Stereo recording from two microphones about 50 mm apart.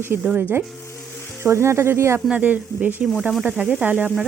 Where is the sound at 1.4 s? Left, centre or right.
Right.